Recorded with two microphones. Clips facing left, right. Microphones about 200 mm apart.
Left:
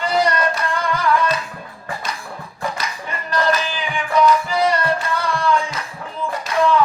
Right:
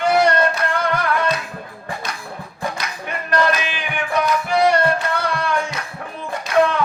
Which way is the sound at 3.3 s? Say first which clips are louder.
Even; 65° right (ahead or behind).